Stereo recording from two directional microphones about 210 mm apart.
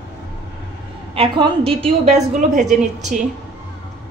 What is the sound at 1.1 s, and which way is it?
A woman's voice, 25° right (ahead or behind).